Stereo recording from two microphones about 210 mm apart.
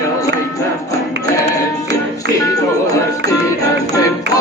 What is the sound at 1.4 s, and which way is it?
Music, 15° left (ahead or behind).